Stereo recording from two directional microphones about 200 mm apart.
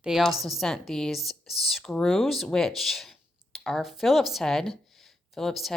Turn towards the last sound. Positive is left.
turn(degrees=0)  # may be behind; listen again after turning